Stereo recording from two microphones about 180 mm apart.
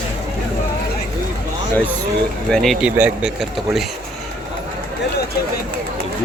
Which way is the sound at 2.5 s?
Centre (ahead or behind).